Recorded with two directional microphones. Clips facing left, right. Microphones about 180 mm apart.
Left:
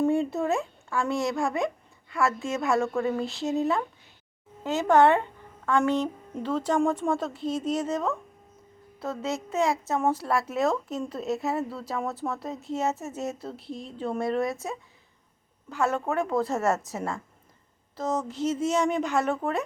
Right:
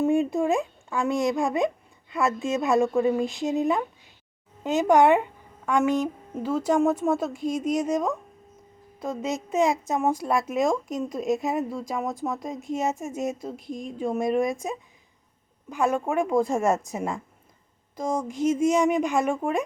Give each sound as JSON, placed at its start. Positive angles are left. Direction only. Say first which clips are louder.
{"t": 0.0, "sound": "a woman's voice", "louder": "right 2 dB", "side_deg": -15}